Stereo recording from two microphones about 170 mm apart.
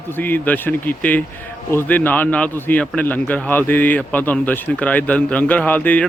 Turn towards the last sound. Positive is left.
turn(degrees=10)  # may be behind; listen again after turning